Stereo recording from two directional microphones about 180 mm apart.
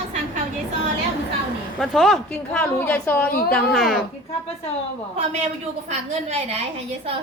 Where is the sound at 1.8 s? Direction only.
Centre (ahead or behind).